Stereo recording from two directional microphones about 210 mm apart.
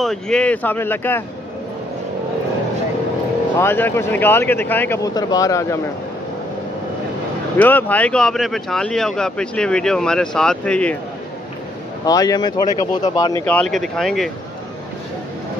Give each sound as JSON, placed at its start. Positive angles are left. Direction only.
{"t": 0.0, "sound": "speech", "side_deg": 5}
{"t": 3.5, "sound": "speech", "side_deg": 10}
{"t": 7.5, "sound": "speech", "side_deg": 10}
{"t": 12.1, "sound": "speech", "side_deg": 15}